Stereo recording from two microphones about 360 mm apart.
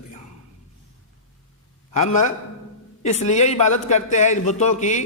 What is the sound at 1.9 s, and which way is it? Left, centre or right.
A man's voice, left.